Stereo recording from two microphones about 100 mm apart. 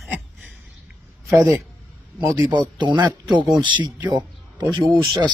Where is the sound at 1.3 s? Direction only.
30° right (ahead or behind).